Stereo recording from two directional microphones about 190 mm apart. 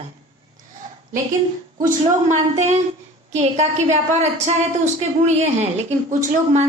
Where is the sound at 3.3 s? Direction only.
35° right (ahead or behind).